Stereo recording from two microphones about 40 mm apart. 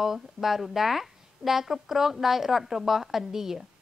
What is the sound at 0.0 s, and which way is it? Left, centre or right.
A woman's voice, centre.